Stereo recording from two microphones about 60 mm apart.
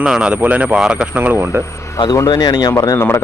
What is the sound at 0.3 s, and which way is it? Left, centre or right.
Speech, right.